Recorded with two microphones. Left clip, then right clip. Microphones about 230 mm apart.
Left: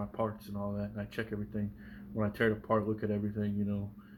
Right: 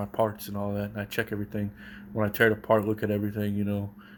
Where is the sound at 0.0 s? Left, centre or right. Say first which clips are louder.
Right 9 dB; right.